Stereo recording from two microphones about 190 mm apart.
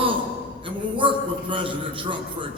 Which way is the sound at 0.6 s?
25° right (ahead or behind).